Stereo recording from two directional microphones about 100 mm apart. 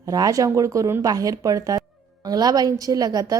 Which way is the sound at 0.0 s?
35° right (ahead or behind).